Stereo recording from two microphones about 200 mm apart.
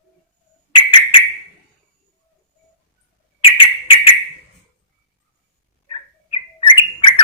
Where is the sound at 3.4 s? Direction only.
25° left (ahead or behind).